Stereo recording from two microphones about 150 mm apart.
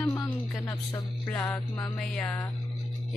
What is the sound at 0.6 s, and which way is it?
Music, 15° left (ahead or behind).